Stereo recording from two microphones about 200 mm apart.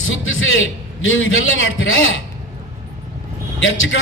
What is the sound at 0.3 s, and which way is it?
A man's voice, 75° left (ahead or behind).